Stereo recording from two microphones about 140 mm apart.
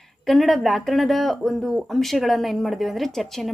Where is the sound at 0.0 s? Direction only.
Centre (ahead or behind).